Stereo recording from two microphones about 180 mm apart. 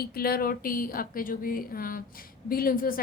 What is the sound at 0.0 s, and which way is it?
A woman's voice, 55° left (ahead or behind).